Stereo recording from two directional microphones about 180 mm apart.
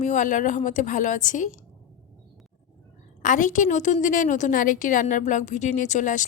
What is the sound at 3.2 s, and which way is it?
A woman's voice, 45° left (ahead or behind).